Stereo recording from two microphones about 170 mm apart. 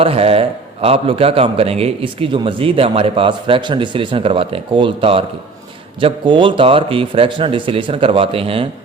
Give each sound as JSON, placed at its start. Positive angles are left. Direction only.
{"t": 0.0, "sound": "a man's voice", "side_deg": -35}